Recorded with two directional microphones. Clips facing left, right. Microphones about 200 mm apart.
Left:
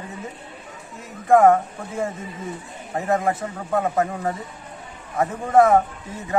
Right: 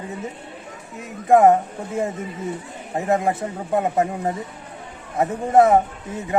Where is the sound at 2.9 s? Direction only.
20° right (ahead or behind).